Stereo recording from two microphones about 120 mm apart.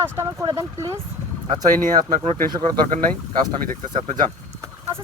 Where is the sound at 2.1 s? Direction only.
70° right (ahead or behind).